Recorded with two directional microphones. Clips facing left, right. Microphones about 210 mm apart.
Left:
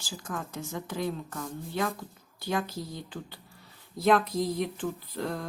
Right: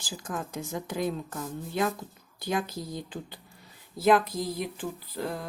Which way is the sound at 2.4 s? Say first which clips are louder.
Right 1 dB; 15° right (ahead or behind).